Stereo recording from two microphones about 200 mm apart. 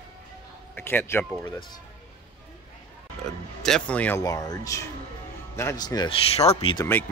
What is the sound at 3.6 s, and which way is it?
Speech, 5° left (ahead or behind).